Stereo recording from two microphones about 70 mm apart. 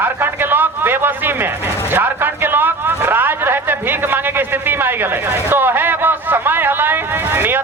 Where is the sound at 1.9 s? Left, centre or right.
Right.